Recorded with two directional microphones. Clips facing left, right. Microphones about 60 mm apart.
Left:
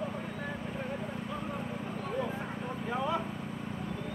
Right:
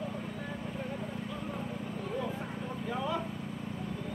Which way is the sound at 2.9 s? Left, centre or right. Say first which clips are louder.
Left 2 dB; centre.